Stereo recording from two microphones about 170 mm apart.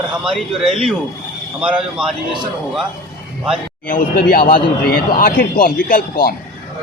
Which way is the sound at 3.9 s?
55° left (ahead or behind).